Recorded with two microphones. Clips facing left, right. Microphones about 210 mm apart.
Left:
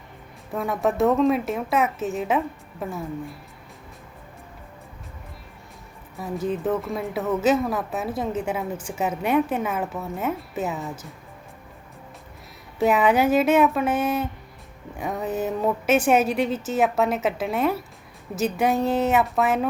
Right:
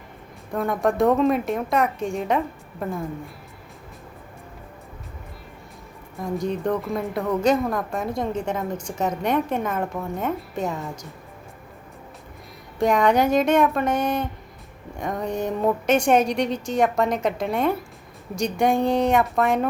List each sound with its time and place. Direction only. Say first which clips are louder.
0.5 s speech: right 1 dB; centre (ahead or behind)
6.4 s speech: left 1 dB; 5° left (ahead or behind)
12.8 s speech: even; 5° left (ahead or behind)